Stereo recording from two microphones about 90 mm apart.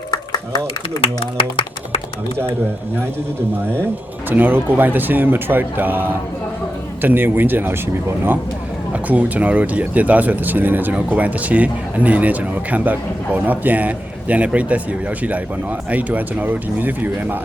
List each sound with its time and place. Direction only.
1.2 s a sound: 90° left
4.3 s speech: 20° right (ahead or behind)
8.9 s speech: 15° right (ahead or behind)